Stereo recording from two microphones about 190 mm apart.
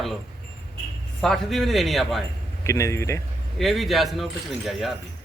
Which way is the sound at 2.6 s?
15° left (ahead or behind).